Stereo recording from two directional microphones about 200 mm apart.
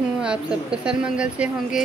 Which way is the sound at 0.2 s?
5° right (ahead or behind).